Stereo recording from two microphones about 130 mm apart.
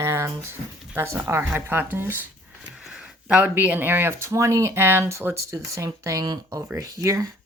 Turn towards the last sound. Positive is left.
turn(degrees=-25)  # may be behind; listen again after turning